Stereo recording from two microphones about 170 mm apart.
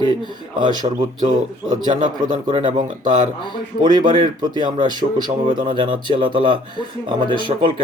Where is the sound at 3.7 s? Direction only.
35° left (ahead or behind).